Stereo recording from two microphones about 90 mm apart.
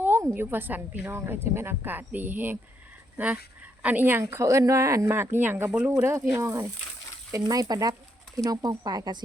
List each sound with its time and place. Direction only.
0.0 s a sound: 25° right (ahead or behind)
0.3 s speech: 20° right (ahead or behind)
3.8 s speech: 20° right (ahead or behind)
4.2 s speech: 35° right (ahead or behind); by 9.2 s 50° right (ahead or behind)